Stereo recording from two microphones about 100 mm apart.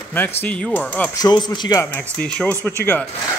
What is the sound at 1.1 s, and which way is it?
Speech, 40° left (ahead or behind).